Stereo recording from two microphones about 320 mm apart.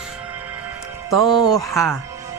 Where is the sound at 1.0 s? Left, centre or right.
Right.